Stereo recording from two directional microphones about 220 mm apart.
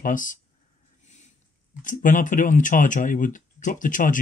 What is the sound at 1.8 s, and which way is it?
Speech, 35° left (ahead or behind).